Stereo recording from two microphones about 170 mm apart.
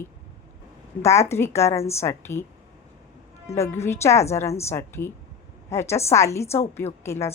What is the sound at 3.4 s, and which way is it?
A woman's voice, 15° left (ahead or behind).